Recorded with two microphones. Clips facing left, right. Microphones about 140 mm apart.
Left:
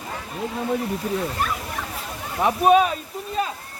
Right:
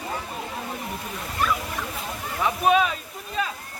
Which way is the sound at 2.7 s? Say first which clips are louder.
Left 4 dB; 40° left (ahead or behind).